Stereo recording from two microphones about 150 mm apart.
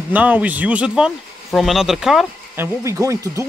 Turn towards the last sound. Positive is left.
turn(degrees=-20)  # may be behind; listen again after turning